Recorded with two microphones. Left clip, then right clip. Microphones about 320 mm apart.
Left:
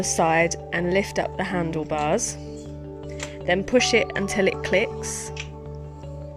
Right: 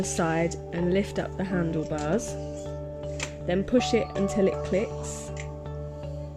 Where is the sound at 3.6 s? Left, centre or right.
Left.